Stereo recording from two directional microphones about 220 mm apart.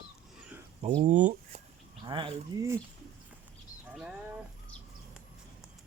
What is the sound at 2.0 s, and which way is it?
Speech, 20° right (ahead or behind).